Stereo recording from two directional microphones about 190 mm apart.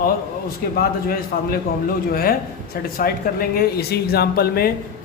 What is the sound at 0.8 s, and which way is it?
Speech, 50° left (ahead or behind).